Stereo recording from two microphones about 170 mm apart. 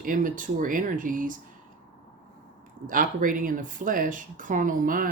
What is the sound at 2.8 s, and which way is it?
Speech, 55° right (ahead or behind).